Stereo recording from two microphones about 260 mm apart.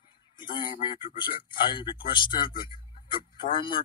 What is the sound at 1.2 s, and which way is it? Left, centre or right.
Speech, centre.